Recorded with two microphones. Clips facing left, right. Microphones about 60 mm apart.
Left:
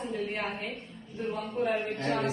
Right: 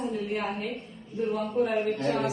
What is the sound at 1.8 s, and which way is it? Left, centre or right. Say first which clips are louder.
Speech: right 3 dB; left.